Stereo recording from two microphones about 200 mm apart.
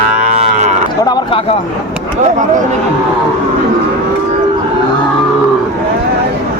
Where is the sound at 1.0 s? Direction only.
20° left (ahead or behind).